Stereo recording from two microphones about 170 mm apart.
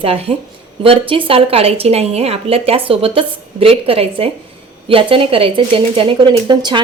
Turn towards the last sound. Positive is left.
turn(degrees=-25)  # may be behind; listen again after turning